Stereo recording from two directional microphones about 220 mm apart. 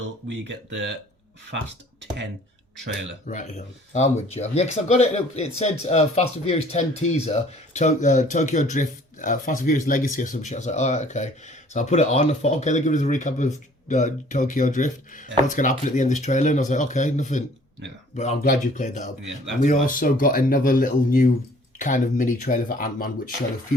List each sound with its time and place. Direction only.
0.3 s speech: 55° right (ahead or behind)
3.2 s speech: 35° left (ahead or behind)